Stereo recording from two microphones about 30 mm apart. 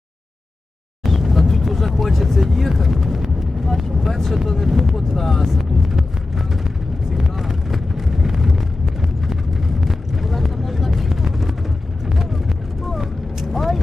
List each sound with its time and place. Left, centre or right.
1.0 s vehicle: centre
4.4 s speech: centre
4.9 s vehicle: centre
9.0 s clip-clop: centre
10.2 s vehicle: centre
13.5 s vehicle: centre